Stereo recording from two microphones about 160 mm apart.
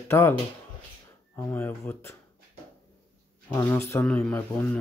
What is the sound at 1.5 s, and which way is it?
Speech, 10° left (ahead or behind).